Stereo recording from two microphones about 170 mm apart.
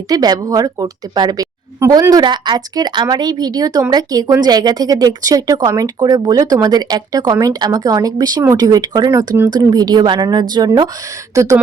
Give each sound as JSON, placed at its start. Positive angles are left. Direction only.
{"t": 0.1, "sound": "a woman's voice", "side_deg": -20}